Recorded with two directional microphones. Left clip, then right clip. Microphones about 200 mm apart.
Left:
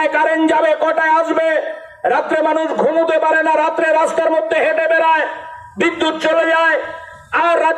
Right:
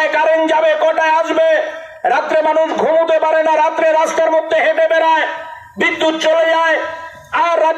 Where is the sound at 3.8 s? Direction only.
45° left (ahead or behind).